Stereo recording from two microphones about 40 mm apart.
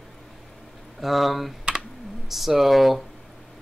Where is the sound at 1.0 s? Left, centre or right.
Centre.